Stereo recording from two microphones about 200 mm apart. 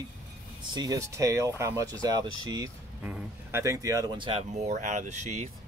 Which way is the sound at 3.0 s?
10° right (ahead or behind).